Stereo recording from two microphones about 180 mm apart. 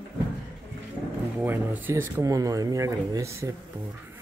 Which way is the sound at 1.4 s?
10° right (ahead or behind).